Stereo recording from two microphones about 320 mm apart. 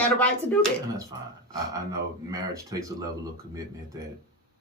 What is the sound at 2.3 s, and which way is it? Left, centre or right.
Speech, centre.